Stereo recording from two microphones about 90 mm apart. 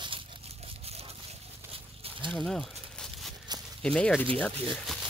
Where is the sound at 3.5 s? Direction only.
50° right (ahead or behind).